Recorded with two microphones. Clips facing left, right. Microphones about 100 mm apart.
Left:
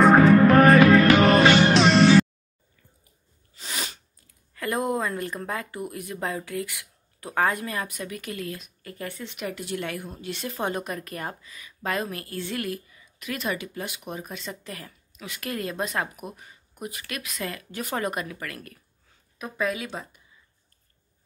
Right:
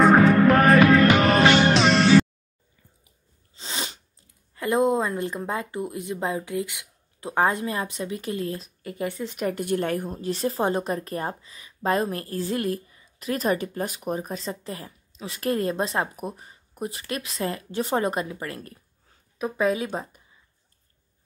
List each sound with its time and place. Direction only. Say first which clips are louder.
0.0 s music: left 1 dB; centre (ahead or behind)
3.5 s sneeze: right 1 dB; 25° right (ahead or behind)
4.6 s a woman's voice: right 5 dB; 20° right (ahead or behind)